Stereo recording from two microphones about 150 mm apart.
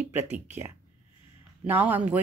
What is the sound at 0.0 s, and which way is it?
Speech, 15° right (ahead or behind).